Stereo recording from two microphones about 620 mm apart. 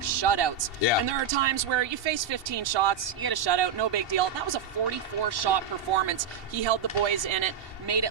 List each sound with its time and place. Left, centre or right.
0.0 s a sound: right
0.9 s speech: left
1.3 s speech: right